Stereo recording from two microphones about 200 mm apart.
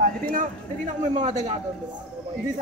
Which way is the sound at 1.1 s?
35° right (ahead or behind).